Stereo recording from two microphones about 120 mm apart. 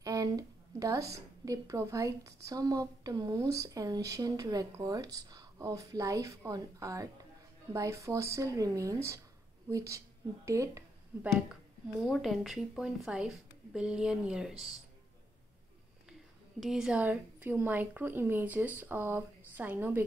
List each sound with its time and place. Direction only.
0.0 s a woman's voice: 30° right (ahead or behind)
11.1 s speech: 10° right (ahead or behind)
12.0 s a woman's voice: centre (ahead or behind)
16.1 s a woman's voice: centre (ahead or behind)